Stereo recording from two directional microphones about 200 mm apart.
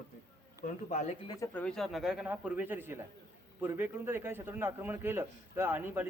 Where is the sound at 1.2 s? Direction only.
10° left (ahead or behind).